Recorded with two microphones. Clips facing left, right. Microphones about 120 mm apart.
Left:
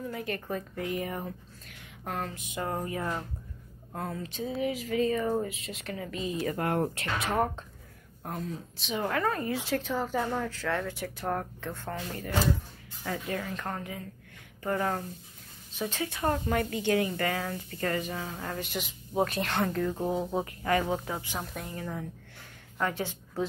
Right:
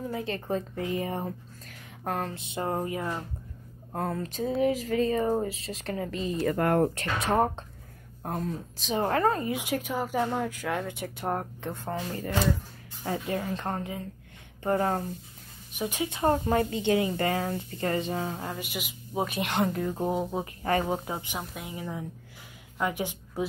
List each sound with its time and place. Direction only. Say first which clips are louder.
0.0 s a woman's voice: right 2 dB; 25° right (ahead or behind)
3.9 s speech: right 5 dB; 45° right (ahead or behind)
8.4 s speech: right 4 dB; 45° right (ahead or behind)
9.4 s a woman's voice: right 1 dB; 15° right (ahead or behind)
13.0 s speech: right 3 dB; 30° right (ahead or behind)
15.7 s speech: right 2 dB; 15° right (ahead or behind)
18.4 s a woman's voice: even; 10° right (ahead or behind)
20.6 s speech: right 2 dB; 30° right (ahead or behind)
21.0 s speech: right 1 dB; 20° right (ahead or behind)
21.4 s a woman's voice: even; 10° right (ahead or behind)